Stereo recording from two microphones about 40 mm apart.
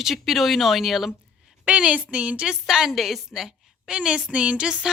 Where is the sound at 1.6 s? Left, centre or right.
Right.